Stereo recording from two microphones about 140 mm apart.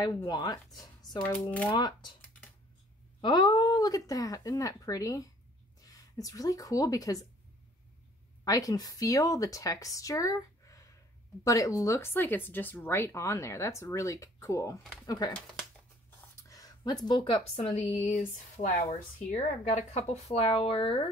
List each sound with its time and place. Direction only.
0.3 s speech: 30° left (ahead or behind)
1.2 s speech: 10° left (ahead or behind)
1.7 s speech: 30° left (ahead or behind)
3.2 s speech: 30° left (ahead or behind)
8.5 s speech: 25° left (ahead or behind)
16.3 s speech: 25° left (ahead or behind); by 21.1 s 40° left (ahead or behind)